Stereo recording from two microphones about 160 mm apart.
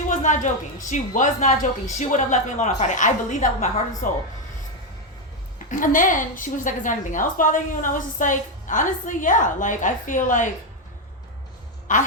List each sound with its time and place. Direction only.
0.1 s a sound: 50° left (ahead or behind)
0.9 s a woman's voice: 50° left (ahead or behind)
5.7 s a woman's voice: 55° left (ahead or behind)
11.9 s a woman's voice: 55° left (ahead or behind)